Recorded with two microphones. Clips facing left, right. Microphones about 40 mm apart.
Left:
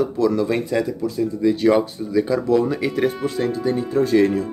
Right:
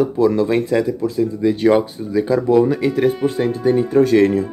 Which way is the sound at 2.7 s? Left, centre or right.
Centre.